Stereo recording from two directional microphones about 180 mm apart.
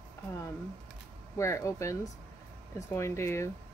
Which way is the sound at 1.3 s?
15° left (ahead or behind).